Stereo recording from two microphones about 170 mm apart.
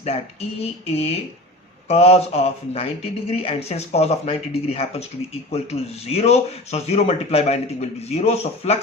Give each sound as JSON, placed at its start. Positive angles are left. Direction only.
{"t": 0.0, "sound": "speech", "side_deg": 40}